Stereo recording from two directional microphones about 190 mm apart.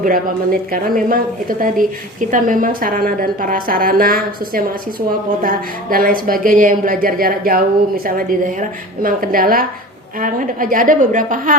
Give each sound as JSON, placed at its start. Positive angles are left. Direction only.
{"t": 0.0, "sound": "a woman's voice", "side_deg": -50}